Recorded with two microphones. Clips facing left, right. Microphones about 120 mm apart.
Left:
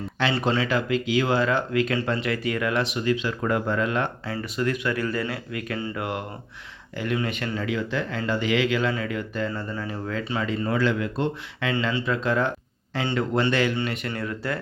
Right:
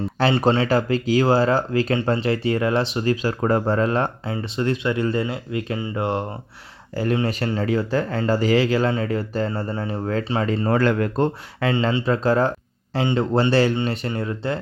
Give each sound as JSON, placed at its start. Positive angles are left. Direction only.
{"t": 0.4, "sound": "speech", "side_deg": -35}
{"t": 10.4, "sound": "speech", "side_deg": -40}
{"t": 11.7, "sound": "speech", "side_deg": -30}